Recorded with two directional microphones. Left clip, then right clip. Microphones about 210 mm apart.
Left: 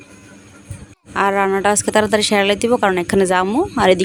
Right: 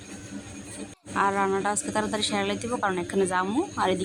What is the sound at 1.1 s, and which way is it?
Speech, 40° left (ahead or behind).